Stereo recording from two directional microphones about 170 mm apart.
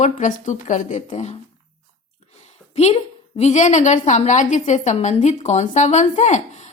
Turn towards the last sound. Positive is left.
turn(degrees=45)  # may be behind; listen again after turning